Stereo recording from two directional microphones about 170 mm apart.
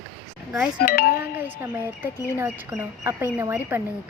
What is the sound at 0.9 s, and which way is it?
Wind chime, 60° left (ahead or behind).